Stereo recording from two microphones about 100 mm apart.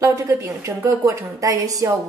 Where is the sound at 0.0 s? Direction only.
30° right (ahead or behind).